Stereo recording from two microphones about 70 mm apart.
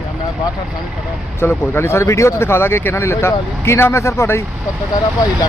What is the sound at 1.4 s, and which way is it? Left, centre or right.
Speech, left.